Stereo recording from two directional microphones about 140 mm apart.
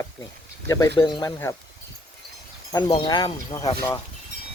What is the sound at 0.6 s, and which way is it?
Speech, 20° left (ahead or behind).